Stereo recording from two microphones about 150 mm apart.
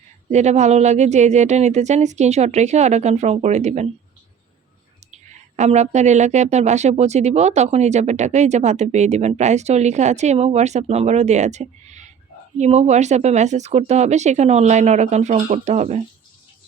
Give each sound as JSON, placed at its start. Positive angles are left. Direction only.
{"t": 0.3, "sound": "speech", "side_deg": -50}
{"t": 5.5, "sound": "speech", "side_deg": -50}